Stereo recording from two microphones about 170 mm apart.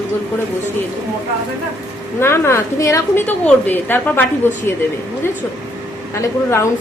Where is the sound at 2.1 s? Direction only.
15° left (ahead or behind).